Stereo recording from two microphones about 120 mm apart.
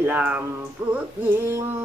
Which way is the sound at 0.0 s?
15° right (ahead or behind).